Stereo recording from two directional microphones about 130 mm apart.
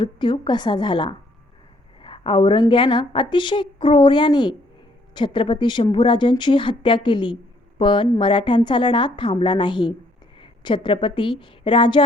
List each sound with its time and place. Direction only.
0.0 s a woman's voice: 35° left (ahead or behind)